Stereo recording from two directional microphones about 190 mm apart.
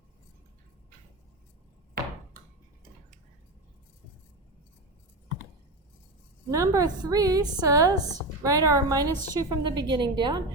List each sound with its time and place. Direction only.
6.5 s a woman's voice: 15° right (ahead or behind)